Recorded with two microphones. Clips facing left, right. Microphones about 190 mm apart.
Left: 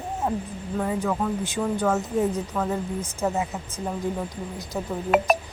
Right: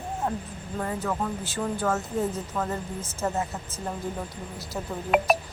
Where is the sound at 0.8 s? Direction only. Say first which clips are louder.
Left 4 dB; 5° left (ahead or behind).